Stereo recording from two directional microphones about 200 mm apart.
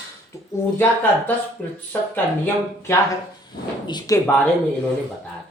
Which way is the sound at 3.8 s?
20° left (ahead or behind).